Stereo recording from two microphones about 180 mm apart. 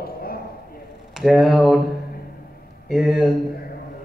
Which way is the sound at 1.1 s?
Centre (ahead or behind).